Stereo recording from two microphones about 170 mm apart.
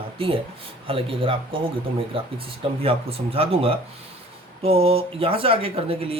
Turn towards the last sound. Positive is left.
turn(degrees=-35)  # may be behind; listen again after turning